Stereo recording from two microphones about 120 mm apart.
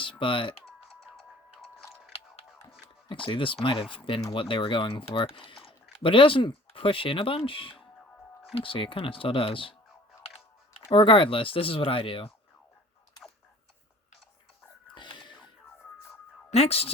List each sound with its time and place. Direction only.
0.0 s speech: 45° left (ahead or behind)
2.1 s music: 55° left (ahead or behind)
3.1 s speech: 45° left (ahead or behind)
10.2 s music: 55° left (ahead or behind)
10.9 s speech: 45° left (ahead or behind)
14.9 s whispering: 40° left (ahead or behind)
16.5 s a woman's voice: 60° left (ahead or behind)